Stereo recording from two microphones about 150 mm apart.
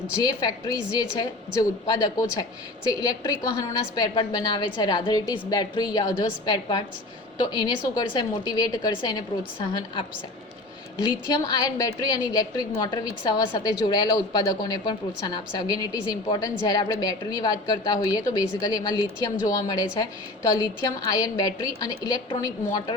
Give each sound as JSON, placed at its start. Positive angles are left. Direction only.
{"t": 0.2, "sound": "a woman's voice", "side_deg": 25}
{"t": 11.0, "sound": "a woman's voice", "side_deg": 25}